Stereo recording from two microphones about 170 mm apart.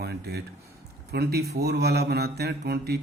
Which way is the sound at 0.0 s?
70° right (ahead or behind).